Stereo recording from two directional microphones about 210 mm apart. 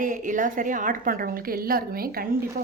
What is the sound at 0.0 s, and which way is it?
A woman's voice, 40° right (ahead or behind).